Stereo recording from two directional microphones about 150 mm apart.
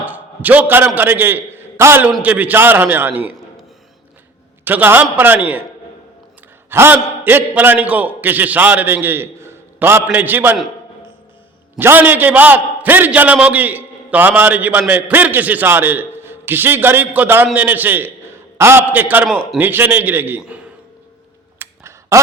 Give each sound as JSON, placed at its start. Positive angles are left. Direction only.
{"t": 0.0, "sound": "a sound", "side_deg": -10}
{"t": 0.9, "sound": "a man's voice", "side_deg": -15}
{"t": 4.6, "sound": "a man's voice", "side_deg": -15}
{"t": 6.7, "sound": "a man's voice", "side_deg": -15}
{"t": 11.8, "sound": "a man's voice", "side_deg": -15}
{"t": 21.6, "sound": "a sound", "side_deg": -20}